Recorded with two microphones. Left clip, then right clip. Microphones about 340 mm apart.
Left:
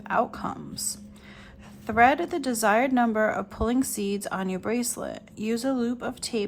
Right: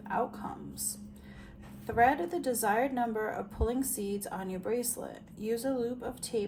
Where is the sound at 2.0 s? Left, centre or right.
Centre.